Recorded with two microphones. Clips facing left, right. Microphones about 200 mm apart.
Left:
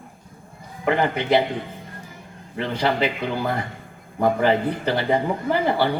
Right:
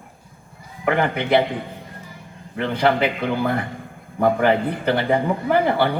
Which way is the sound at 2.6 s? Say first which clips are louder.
Right 3 dB; 55° right (ahead or behind).